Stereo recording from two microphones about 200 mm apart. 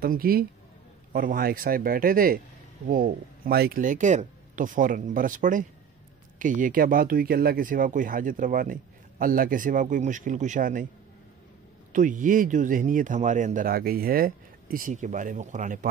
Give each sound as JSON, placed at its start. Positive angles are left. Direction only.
{"t": 0.0, "sound": "speech", "side_deg": -50}
{"t": 11.9, "sound": "speech", "side_deg": -40}